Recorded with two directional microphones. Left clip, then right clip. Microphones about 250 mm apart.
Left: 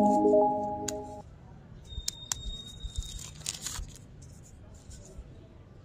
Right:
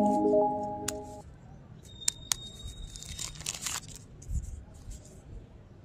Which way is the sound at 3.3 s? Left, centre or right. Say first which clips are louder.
Right 1 dB; centre.